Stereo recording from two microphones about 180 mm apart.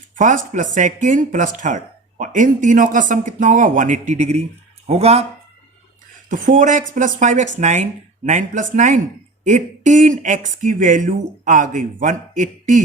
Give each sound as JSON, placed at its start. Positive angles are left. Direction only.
{"t": 0.2, "sound": "speech", "side_deg": -45}
{"t": 6.3, "sound": "speech", "side_deg": -45}